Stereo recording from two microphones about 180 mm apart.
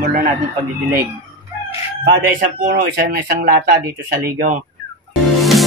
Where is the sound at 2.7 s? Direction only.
55° right (ahead or behind).